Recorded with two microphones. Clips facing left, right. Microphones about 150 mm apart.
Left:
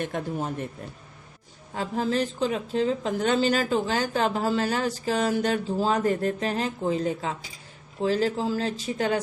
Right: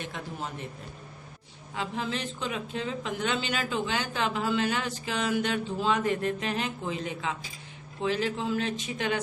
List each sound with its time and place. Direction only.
0.0 s speech: 50° left (ahead or behind)
1.7 s speech: 40° left (ahead or behind)